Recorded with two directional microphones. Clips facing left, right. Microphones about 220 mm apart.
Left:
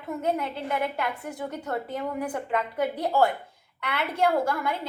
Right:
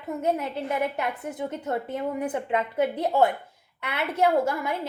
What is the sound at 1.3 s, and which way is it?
A woman's voice, 25° right (ahead or behind).